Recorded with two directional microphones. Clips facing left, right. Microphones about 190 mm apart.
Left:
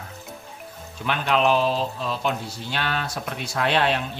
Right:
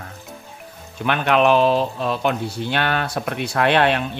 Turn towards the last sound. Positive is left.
turn(degrees=-60)  # may be behind; listen again after turning